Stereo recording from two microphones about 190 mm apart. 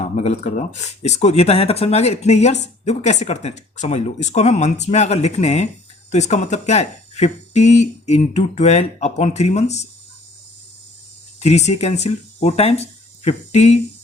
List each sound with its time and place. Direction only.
0.0 s speech: 35° left (ahead or behind)
11.3 s speech: 35° left (ahead or behind)